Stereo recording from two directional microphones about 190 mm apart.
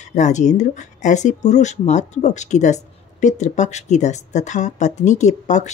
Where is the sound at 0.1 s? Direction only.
40° left (ahead or behind).